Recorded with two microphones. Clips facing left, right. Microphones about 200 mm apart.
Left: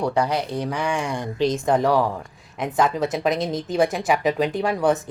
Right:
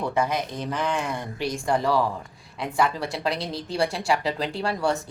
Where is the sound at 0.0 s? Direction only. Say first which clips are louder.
Left 3 dB; 15° left (ahead or behind).